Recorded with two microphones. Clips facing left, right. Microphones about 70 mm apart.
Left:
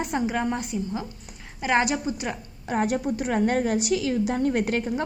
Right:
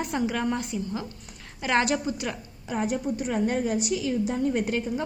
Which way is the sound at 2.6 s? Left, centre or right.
Left.